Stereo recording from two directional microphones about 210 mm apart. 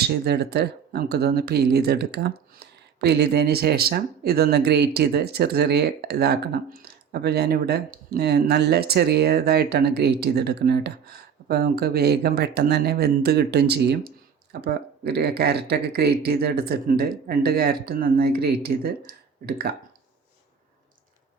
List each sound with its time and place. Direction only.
0.1 s speech: 50° right (ahead or behind)